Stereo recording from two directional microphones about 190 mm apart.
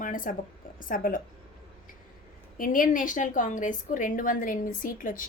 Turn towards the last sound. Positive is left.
turn(degrees=45)  # may be behind; listen again after turning